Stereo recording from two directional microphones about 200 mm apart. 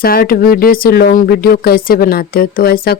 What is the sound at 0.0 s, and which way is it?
Speech, 50° left (ahead or behind).